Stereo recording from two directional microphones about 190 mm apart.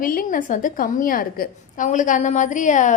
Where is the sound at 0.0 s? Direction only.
50° left (ahead or behind).